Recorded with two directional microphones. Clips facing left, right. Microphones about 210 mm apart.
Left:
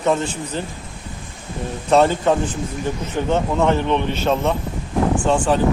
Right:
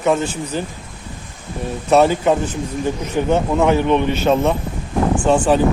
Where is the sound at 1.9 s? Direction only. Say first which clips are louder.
Right 2 dB; 10° right (ahead or behind).